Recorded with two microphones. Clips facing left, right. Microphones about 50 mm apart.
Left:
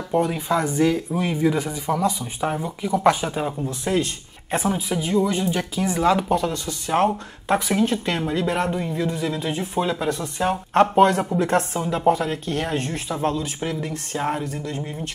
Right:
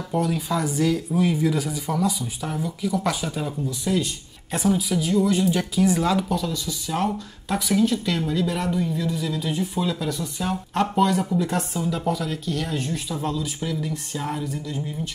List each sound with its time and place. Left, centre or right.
0.1 s speech: left
5.2 s speech: centre
6.3 s speech: left